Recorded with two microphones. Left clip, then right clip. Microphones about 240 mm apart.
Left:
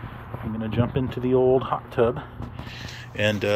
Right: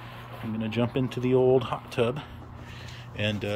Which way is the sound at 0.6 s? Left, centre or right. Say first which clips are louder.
Left 2 dB; centre.